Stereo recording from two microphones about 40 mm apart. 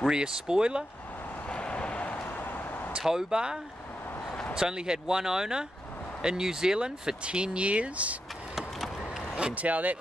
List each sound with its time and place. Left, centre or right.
0.1 s speech: centre
1.5 s vehicle: left
2.3 s a sound: left
3.1 s speech: centre
4.6 s speech: centre; by 8.2 s right
9.5 s speech: right